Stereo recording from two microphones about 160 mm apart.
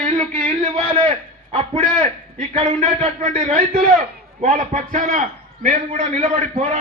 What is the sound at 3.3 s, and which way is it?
A man's voice, 45° right (ahead or behind).